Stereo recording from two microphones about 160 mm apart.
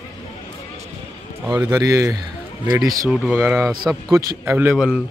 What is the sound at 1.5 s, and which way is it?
Speech, 20° right (ahead or behind).